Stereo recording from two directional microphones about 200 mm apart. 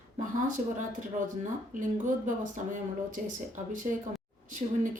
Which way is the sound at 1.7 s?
40° right (ahead or behind).